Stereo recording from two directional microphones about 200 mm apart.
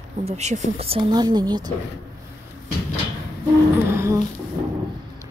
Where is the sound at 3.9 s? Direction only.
15° right (ahead or behind).